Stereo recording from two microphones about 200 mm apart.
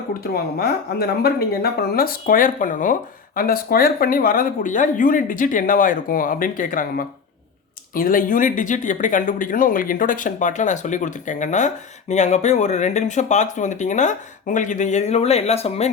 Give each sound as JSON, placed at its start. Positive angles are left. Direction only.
{"t": 0.6, "sound": "speech", "side_deg": 50}